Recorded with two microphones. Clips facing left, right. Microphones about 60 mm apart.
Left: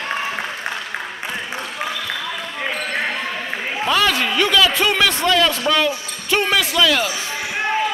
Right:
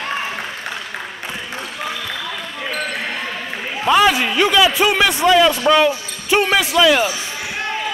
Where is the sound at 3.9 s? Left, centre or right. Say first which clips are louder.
Right 5 dB; centre.